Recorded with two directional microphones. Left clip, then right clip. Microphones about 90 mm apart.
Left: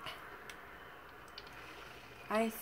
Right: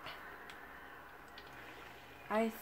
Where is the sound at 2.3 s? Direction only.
35° left (ahead or behind).